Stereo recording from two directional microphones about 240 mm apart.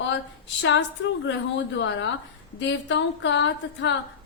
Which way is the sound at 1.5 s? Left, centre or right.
Left.